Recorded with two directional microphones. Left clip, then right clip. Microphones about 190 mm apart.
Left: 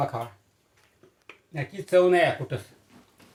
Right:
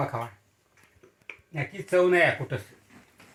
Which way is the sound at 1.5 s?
15° right (ahead or behind).